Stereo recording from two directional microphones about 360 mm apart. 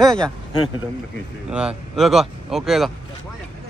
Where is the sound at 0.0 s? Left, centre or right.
Centre.